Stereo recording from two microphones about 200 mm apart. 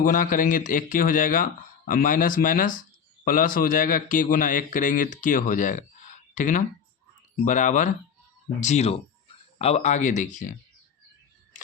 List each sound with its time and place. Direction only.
0.0 s speech: 45° left (ahead or behind)